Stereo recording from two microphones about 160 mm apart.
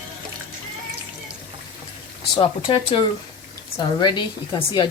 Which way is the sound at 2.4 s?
35° left (ahead or behind).